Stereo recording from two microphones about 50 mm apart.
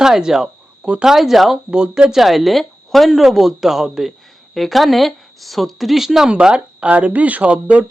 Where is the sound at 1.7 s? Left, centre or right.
Centre.